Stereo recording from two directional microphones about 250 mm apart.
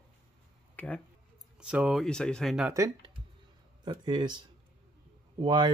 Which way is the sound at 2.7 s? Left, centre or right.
Centre.